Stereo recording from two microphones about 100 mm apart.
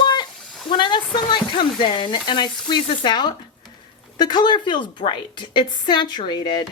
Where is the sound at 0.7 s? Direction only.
55° left (ahead or behind).